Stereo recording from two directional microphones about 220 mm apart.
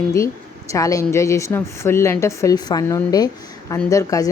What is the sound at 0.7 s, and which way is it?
Speech, 15° left (ahead or behind).